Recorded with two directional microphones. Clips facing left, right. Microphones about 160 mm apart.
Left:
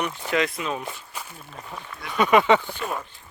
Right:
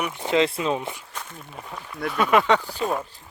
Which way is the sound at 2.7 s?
35° right (ahead or behind).